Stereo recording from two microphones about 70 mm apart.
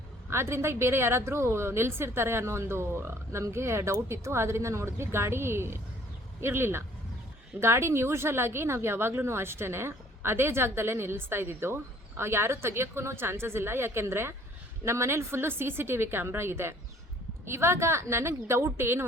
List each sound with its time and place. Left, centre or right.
0.3 s a woman's voice: right